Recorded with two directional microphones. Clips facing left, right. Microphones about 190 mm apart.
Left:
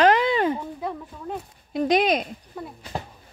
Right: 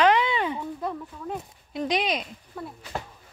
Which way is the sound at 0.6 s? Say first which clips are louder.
Even; 5° left (ahead or behind).